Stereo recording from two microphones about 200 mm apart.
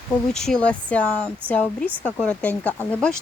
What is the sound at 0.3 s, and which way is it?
Speech, centre (ahead or behind).